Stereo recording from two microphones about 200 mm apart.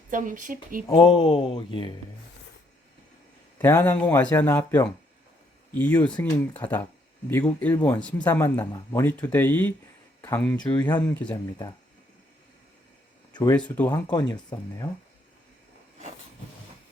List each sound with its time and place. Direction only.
0.1 s speech: 40° right (ahead or behind)
0.9 s speech: 25° left (ahead or behind)
3.6 s speech: 10° left (ahead or behind)
13.3 s speech: 20° left (ahead or behind)